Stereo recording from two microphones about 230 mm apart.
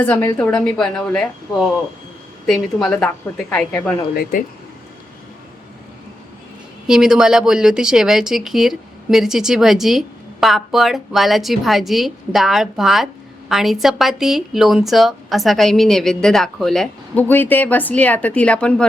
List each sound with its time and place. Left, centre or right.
0.0 s a woman's voice: centre
4.1 s speech: left
6.8 s a woman's voice: centre